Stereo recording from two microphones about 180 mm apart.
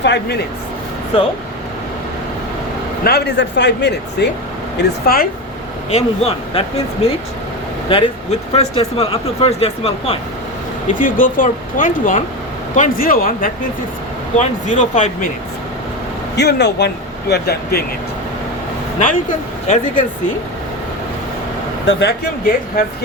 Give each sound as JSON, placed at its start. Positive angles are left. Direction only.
{"t": 0.0, "sound": "speech", "side_deg": 70}
{"t": 3.0, "sound": "speech", "side_deg": 60}
{"t": 4.8, "sound": "speech", "side_deg": 55}
{"t": 5.9, "sound": "speech", "side_deg": 35}
{"t": 10.9, "sound": "speech", "side_deg": 50}
{"t": 16.4, "sound": "speech", "side_deg": 70}
{"t": 19.6, "sound": "speech", "side_deg": 45}
{"t": 21.8, "sound": "speech", "side_deg": 65}